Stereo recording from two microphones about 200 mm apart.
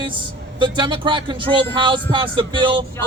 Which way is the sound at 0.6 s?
25° right (ahead or behind).